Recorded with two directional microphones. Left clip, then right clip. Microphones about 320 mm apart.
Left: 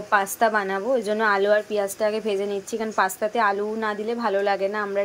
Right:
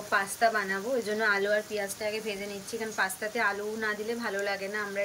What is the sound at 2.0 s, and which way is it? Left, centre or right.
Speech, left.